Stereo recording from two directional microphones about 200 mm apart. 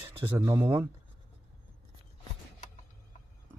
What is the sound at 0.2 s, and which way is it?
Speech, 15° right (ahead or behind).